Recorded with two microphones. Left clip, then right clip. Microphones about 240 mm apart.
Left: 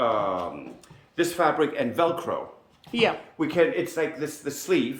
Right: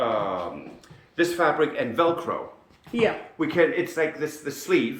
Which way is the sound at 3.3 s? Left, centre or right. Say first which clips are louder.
Right 2 dB; left.